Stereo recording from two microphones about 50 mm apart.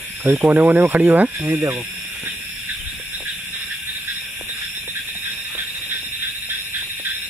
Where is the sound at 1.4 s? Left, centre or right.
Right.